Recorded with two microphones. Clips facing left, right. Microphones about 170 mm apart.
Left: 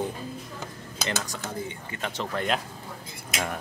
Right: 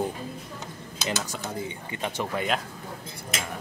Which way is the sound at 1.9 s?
15° right (ahead or behind).